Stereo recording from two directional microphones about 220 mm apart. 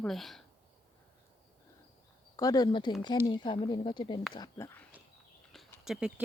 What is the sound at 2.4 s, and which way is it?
Speech, 15° left (ahead or behind).